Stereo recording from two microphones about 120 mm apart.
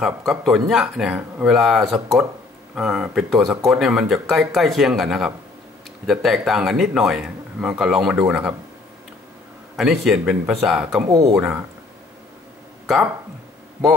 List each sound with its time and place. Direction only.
0.0 s speech: centre (ahead or behind)
9.8 s speech: centre (ahead or behind)
11.1 s speech: 30° right (ahead or behind)
11.3 s speech: 10° right (ahead or behind)